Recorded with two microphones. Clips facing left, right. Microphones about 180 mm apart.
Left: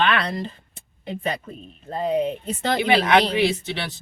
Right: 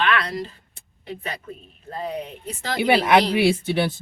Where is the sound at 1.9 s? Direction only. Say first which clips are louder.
Left 7 dB; 25° left (ahead or behind).